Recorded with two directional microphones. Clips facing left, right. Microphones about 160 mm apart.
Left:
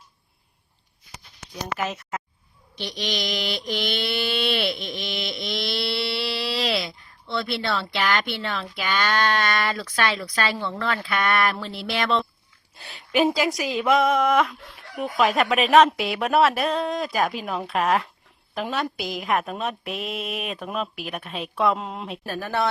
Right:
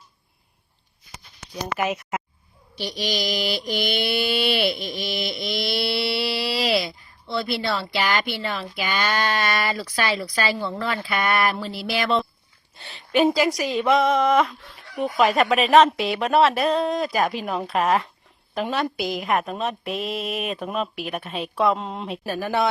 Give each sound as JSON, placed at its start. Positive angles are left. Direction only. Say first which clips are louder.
{"t": 1.6, "sound": "speech", "louder": "right 3 dB", "side_deg": -15}
{"t": 2.7, "sound": "mantra", "louder": "right 2 dB", "side_deg": -5}
{"t": 22.4, "sound": "speech", "louder": "right 2 dB", "side_deg": -15}